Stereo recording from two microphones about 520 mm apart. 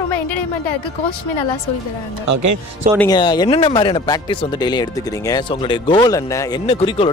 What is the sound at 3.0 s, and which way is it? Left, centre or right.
Speech, centre.